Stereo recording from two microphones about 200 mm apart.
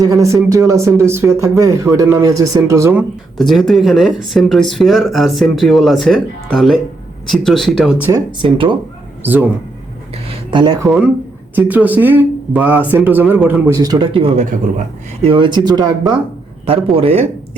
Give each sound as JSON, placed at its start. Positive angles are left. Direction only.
{"t": 0.0, "sound": "speech", "side_deg": -15}
{"t": 8.4, "sound": "speech", "side_deg": -25}
{"t": 9.2, "sound": "speech", "side_deg": -10}
{"t": 10.2, "sound": "a sound", "side_deg": -25}
{"t": 10.8, "sound": "speech", "side_deg": 0}